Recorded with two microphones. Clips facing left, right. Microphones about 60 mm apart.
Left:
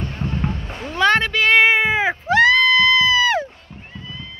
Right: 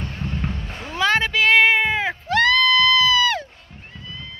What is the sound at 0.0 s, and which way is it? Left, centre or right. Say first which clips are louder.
Music: left 4 dB; centre.